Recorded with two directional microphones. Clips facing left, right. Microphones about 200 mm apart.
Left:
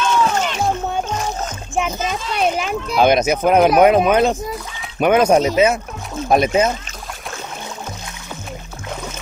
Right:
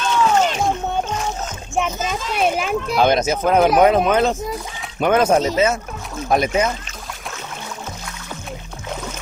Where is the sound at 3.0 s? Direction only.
15° left (ahead or behind).